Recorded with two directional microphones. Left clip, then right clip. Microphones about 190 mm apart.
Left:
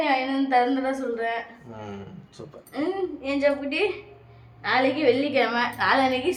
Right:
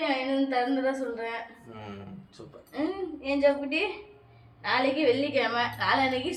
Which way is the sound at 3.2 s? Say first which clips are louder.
Even; 20° left (ahead or behind).